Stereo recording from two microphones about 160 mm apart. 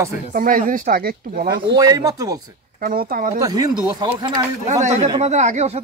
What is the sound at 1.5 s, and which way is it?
Speech, 25° right (ahead or behind).